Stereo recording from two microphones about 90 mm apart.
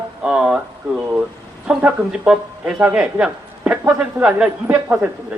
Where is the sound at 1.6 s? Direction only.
10° right (ahead or behind).